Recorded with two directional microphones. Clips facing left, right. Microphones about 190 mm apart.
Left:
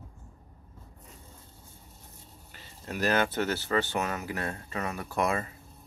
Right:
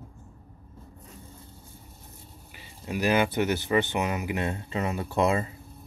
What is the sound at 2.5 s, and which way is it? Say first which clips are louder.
Speech: right 4 dB; 10° right (ahead or behind).